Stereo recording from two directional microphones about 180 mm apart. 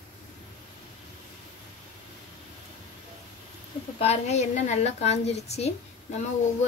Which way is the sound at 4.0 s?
35° left (ahead or behind).